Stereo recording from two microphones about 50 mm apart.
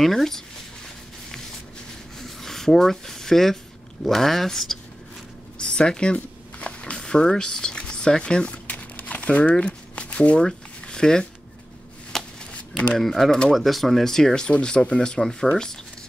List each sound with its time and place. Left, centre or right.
0.0 s speech: centre
2.1 s a sound: centre
4.0 s speech: centre
5.6 s zipper: centre
12.1 s shuffling cards: centre
12.9 s speech: centre